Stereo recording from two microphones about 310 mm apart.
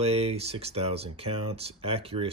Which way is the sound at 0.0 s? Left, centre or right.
Centre.